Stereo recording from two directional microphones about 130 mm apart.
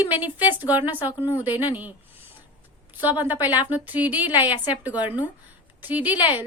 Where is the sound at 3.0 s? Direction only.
15° right (ahead or behind).